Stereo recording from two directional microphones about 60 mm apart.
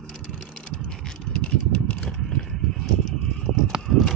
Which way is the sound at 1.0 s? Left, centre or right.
Centre.